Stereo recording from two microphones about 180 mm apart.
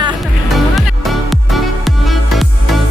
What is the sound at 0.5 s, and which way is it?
Music, centre (ahead or behind).